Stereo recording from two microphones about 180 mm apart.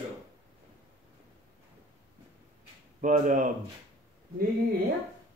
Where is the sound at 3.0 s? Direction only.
45° right (ahead or behind).